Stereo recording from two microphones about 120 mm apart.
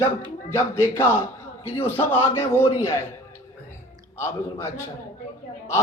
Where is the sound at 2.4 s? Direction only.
20° left (ahead or behind).